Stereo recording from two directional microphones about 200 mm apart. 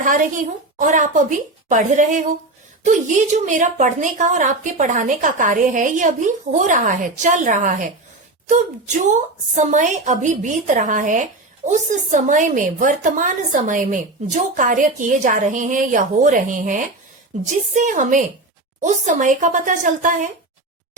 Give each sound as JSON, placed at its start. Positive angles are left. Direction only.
{"t": 0.0, "sound": "a woman's voice", "side_deg": -40}
{"t": 9.6, "sound": "a woman's voice", "side_deg": -35}